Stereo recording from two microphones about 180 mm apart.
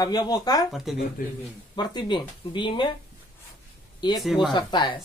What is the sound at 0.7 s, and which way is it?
Speech, centre (ahead or behind).